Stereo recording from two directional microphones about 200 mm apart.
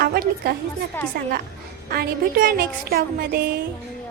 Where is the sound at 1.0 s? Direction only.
10° left (ahead or behind).